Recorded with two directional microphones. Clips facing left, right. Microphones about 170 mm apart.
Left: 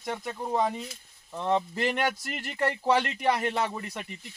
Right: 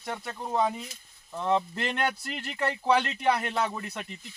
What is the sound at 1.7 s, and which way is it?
Speech, 10° left (ahead or behind).